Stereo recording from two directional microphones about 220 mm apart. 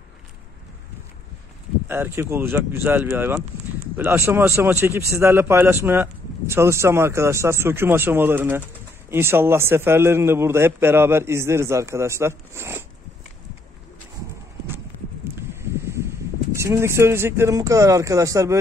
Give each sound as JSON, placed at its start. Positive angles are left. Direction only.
{"t": 1.9, "sound": "a man's voice", "side_deg": -10}
{"t": 15.6, "sound": "a sound", "side_deg": -10}
{"t": 16.6, "sound": "a man's voice", "side_deg": -10}